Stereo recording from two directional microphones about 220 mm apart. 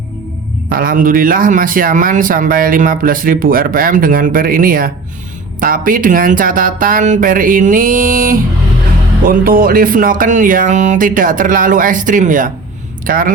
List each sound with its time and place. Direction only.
0.7 s speech: 40° right (ahead or behind)